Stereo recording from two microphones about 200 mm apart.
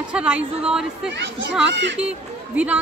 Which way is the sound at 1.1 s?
60° right (ahead or behind).